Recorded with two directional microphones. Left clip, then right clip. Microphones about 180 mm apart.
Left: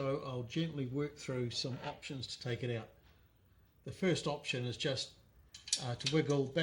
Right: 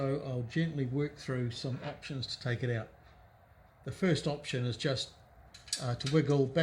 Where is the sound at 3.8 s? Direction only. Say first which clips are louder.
Right 3 dB; 40° right (ahead or behind).